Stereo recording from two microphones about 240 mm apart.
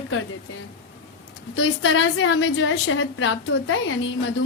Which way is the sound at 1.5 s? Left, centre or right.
Left.